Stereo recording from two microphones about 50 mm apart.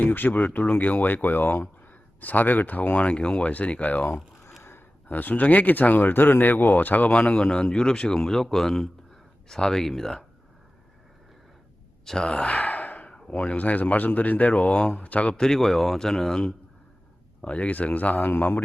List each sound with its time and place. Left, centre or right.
0.0 s speech: left
3.1 s speech: left
5.0 s speech: left
7.1 s a man's voice: left; by 10.2 s centre
12.0 s sigh: centre; by 13.1 s left
13.1 s speech: centre
15.4 s a man's voice: centre
17.4 s speech: left